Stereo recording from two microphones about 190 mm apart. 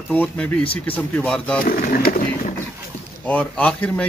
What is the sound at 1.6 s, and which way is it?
Speech, 45° left (ahead or behind).